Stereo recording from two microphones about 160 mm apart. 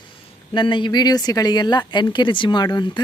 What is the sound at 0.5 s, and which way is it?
Speech, 30° left (ahead or behind).